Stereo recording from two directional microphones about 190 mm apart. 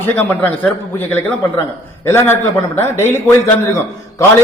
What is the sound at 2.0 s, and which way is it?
A man's voice, 10° left (ahead or behind).